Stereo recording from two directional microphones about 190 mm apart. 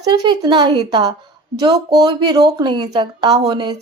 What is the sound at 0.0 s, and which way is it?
A woman's voice, 20° right (ahead or behind).